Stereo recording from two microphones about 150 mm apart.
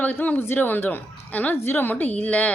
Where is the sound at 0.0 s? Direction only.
10° left (ahead or behind).